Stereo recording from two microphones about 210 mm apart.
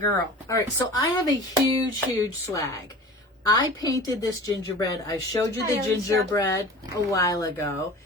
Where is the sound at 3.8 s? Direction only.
15° left (ahead or behind).